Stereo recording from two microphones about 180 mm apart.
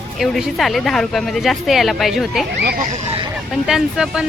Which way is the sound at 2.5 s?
60° right (ahead or behind).